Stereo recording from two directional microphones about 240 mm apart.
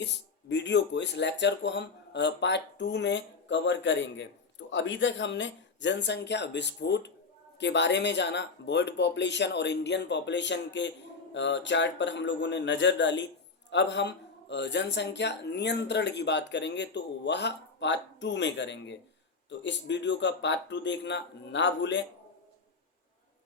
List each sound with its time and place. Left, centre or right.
0.0 s speech: left